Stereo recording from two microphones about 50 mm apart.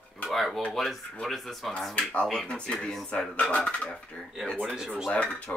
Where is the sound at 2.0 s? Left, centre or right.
Left.